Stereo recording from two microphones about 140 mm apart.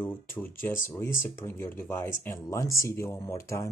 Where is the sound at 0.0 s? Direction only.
15° left (ahead or behind).